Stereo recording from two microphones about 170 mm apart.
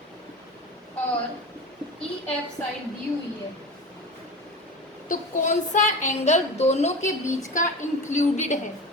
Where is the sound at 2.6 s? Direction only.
10° left (ahead or behind).